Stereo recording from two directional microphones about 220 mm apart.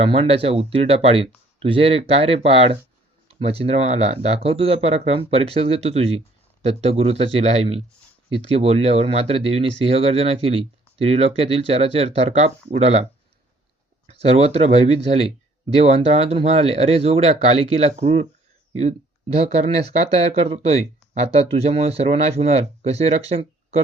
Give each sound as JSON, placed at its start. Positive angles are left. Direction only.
{"t": 0.0, "sound": "speech", "side_deg": -25}
{"t": 14.1, "sound": "speech", "side_deg": -30}